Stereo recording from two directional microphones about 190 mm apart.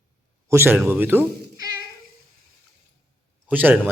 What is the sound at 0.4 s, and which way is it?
Speech, 10° right (ahead or behind).